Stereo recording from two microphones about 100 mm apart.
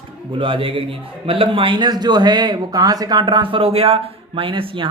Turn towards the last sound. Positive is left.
turn(degrees=-60)  # may be behind; listen again after turning